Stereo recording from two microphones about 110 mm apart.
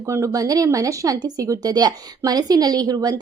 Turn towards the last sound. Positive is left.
turn(degrees=-35)  # may be behind; listen again after turning